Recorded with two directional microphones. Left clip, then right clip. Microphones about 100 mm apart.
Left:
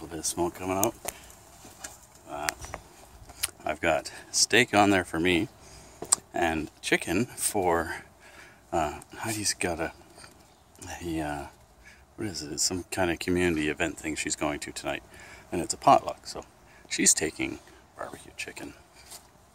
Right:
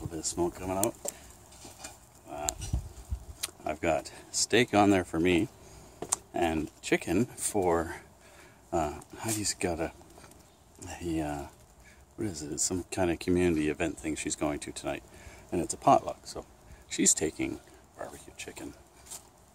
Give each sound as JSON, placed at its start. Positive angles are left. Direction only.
{"t": 0.1, "sound": "speech", "side_deg": 20}
{"t": 3.6, "sound": "speech", "side_deg": -20}